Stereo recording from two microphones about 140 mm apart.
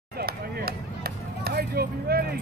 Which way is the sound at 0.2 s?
90° right.